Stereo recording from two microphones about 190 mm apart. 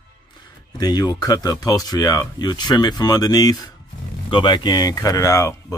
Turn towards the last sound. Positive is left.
turn(degrees=15)  # may be behind; listen again after turning